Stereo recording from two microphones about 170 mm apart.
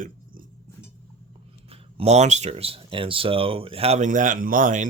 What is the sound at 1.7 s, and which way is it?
Speech, 35° right (ahead or behind).